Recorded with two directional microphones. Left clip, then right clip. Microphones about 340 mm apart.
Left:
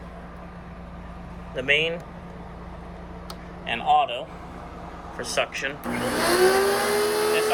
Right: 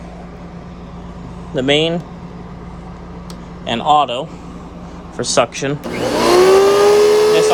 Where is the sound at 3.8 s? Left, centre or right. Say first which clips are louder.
Right 8 dB; centre.